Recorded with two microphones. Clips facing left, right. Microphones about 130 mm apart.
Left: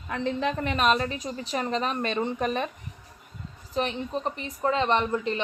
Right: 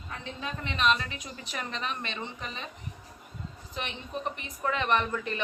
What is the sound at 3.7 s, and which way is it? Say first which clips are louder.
A woman's voice: left 9 dB; 35° left (ahead or behind).